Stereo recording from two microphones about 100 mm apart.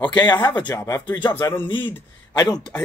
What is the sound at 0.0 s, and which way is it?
Speech, 50° left (ahead or behind).